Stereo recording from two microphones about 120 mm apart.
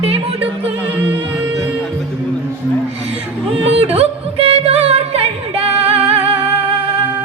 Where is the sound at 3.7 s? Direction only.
55° right (ahead or behind).